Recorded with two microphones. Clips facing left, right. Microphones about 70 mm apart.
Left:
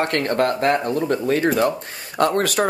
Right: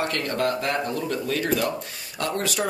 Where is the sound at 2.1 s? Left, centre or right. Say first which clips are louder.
Left 8 dB; left.